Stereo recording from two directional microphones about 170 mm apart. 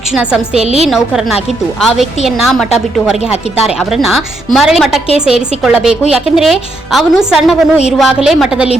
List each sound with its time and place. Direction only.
0.1 s a woman's voice: 5° right (ahead or behind)
0.6 s a woman's voice: 40° right (ahead or behind)
0.9 s a woman's voice: centre (ahead or behind)
3.8 s a woman's voice: centre (ahead or behind)